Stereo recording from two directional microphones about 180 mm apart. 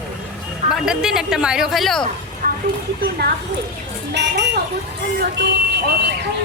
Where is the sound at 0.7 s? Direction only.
5° right (ahead or behind).